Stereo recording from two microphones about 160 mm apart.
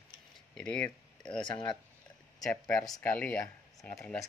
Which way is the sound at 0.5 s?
5° left (ahead or behind).